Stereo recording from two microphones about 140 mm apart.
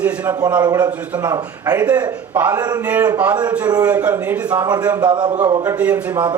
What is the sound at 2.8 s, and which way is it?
Speech, 10° right (ahead or behind).